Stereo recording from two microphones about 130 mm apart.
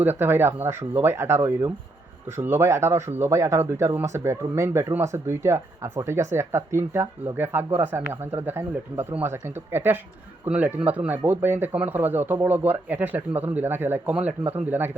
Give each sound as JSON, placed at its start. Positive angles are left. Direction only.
{"t": 0.0, "sound": "speech", "side_deg": -15}